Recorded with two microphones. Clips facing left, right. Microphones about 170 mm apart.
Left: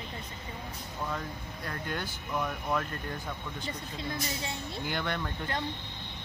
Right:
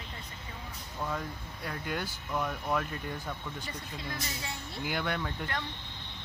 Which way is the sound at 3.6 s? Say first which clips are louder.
Left 3 dB; 25° left (ahead or behind).